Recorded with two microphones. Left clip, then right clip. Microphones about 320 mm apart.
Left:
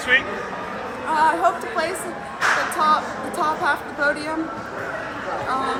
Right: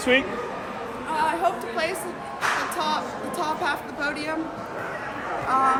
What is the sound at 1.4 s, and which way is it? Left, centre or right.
Speech, centre.